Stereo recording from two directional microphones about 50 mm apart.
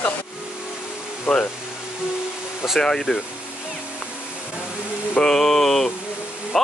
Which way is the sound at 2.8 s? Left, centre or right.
Centre.